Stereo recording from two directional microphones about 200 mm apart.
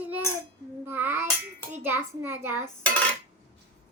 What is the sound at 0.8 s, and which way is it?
Speech, 10° right (ahead or behind).